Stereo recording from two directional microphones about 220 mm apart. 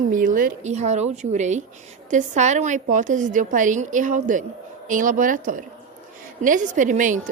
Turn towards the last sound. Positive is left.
turn(degrees=-35)  # may be behind; listen again after turning